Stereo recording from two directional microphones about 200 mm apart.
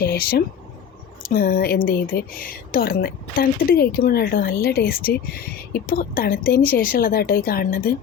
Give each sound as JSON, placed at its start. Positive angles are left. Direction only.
{"t": 0.0, "sound": "speech", "side_deg": 50}